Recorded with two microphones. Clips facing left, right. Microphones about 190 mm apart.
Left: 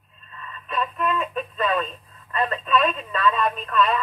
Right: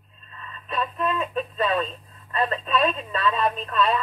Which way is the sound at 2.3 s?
35° right (ahead or behind).